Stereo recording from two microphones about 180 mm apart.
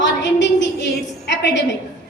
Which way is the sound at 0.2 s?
80° left.